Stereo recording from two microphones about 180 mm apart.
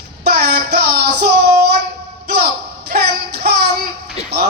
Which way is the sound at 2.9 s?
60° right (ahead or behind).